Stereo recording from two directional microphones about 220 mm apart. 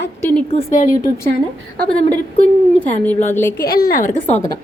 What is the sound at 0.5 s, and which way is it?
Speech, 35° left (ahead or behind).